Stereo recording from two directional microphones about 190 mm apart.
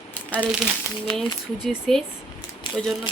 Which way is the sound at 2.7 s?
25° left (ahead or behind).